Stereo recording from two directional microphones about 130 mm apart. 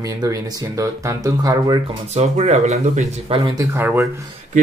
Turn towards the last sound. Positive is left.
turn(degrees=-15)  # may be behind; listen again after turning